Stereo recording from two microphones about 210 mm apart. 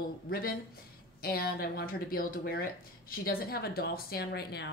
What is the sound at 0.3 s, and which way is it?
Speech, 45° left (ahead or behind).